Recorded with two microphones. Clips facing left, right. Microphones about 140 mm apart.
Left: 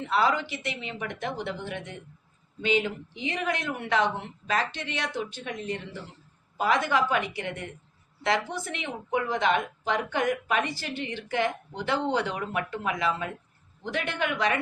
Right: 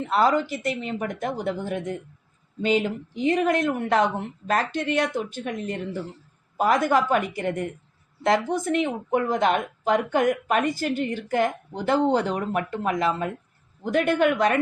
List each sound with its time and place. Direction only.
0.1 s speech: 45° right (ahead or behind)